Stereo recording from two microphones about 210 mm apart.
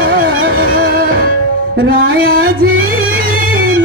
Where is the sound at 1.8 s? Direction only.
45° right (ahead or behind).